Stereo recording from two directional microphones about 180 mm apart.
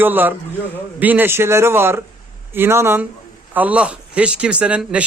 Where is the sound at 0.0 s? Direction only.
10° right (ahead or behind).